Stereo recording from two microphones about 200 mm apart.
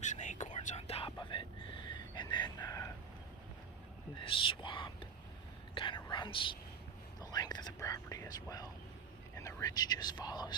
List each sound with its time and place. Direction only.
0.0 s whispering: 35° left (ahead or behind); by 2.9 s 15° left (ahead or behind)
4.2 s whispering: 25° left (ahead or behind)
9.3 s speech: 15° left (ahead or behind)